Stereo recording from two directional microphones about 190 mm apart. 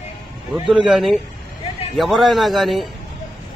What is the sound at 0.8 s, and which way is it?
Speech, centre (ahead or behind).